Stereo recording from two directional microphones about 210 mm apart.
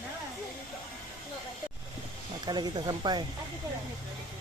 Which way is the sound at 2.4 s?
20° right (ahead or behind).